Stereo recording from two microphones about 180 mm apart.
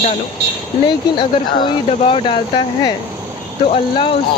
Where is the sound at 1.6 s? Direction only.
30° left (ahead or behind).